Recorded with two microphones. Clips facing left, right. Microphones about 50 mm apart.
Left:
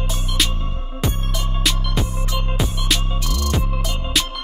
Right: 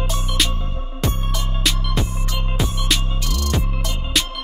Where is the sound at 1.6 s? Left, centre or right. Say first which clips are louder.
Even; centre.